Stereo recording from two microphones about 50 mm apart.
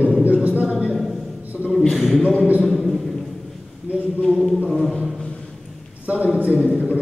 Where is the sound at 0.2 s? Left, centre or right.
Right.